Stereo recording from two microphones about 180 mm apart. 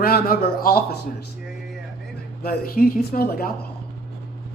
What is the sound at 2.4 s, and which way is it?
Speech, 55° left (ahead or behind).